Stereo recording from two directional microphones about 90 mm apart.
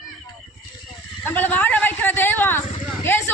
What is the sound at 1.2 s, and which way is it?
Speech, 20° left (ahead or behind).